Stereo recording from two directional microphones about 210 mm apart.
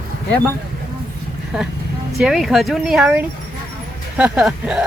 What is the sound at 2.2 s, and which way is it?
Speech, centre (ahead or behind).